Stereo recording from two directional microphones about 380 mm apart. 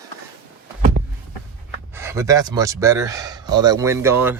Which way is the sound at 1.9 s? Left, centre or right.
Centre.